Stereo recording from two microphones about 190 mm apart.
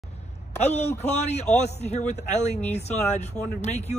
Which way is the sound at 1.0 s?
35° left (ahead or behind).